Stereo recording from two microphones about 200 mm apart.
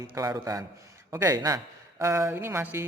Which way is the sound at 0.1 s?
15° right (ahead or behind).